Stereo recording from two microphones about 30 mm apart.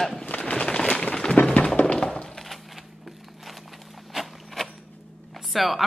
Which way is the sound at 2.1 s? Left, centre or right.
Centre.